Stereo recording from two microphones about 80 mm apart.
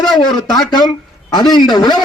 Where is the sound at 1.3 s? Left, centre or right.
Left.